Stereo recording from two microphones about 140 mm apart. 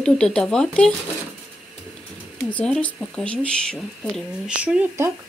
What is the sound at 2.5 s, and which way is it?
Speech, 10° left (ahead or behind).